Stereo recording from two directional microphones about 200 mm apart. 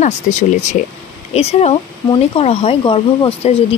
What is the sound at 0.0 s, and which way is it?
Speech, 35° left (ahead or behind).